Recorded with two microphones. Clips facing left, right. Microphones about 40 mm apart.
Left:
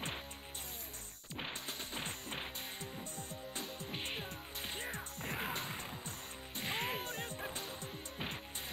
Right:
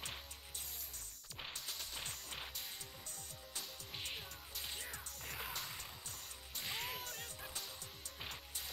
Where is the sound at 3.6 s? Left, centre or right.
Left.